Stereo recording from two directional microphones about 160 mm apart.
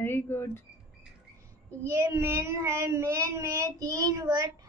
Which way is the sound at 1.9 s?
15° right (ahead or behind).